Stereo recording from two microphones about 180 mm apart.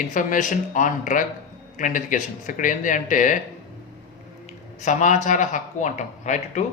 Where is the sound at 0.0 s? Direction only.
45° left (ahead or behind).